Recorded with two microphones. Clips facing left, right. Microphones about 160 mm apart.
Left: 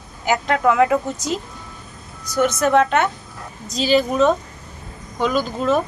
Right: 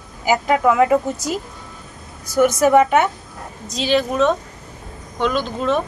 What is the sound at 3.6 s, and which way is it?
Speech, centre (ahead or behind).